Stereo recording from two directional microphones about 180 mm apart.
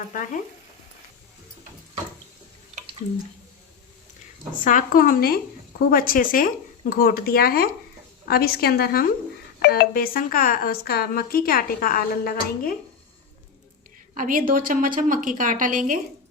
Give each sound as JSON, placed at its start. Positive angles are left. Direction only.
{"t": 4.6, "sound": "a woman's voice", "side_deg": 50}
{"t": 14.2, "sound": "a woman's voice", "side_deg": -50}